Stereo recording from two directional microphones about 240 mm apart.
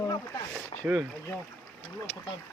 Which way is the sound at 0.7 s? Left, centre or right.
Centre.